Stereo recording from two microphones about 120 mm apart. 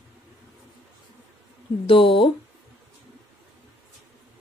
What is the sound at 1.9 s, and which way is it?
Speech, 50° left (ahead or behind).